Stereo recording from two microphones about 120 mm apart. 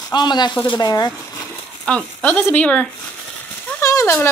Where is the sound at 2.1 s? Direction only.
15° left (ahead or behind).